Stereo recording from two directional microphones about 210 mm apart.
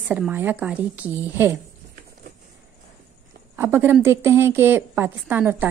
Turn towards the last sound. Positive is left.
turn(degrees=-10)  # may be behind; listen again after turning